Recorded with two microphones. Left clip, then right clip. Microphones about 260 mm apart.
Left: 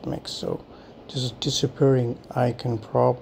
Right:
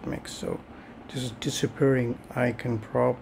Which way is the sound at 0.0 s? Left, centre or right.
Centre.